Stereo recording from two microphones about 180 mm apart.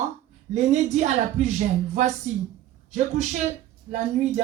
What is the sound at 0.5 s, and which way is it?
Speech, 40° right (ahead or behind).